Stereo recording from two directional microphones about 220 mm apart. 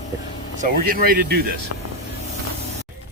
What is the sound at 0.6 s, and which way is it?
Speech, 40° right (ahead or behind).